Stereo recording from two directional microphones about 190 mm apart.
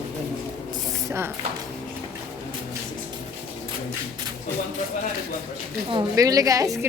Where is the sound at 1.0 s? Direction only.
15° right (ahead or behind).